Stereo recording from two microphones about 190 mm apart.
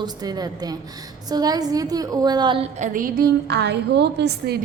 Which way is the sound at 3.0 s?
50° right (ahead or behind).